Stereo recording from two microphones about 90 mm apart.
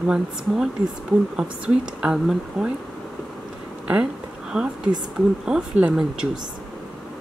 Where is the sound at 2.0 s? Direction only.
10° right (ahead or behind).